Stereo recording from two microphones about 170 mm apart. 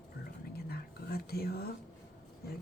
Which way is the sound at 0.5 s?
65° left (ahead or behind).